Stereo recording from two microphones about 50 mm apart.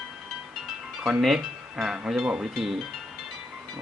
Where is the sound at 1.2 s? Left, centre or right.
Centre.